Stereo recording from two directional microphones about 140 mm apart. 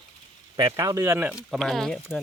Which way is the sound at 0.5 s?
25° right (ahead or behind).